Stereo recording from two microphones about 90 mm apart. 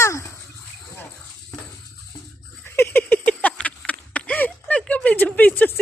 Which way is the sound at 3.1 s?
15° left (ahead or behind).